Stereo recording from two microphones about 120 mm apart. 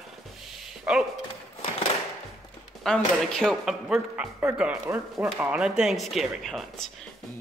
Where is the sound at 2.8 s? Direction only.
5° left (ahead or behind).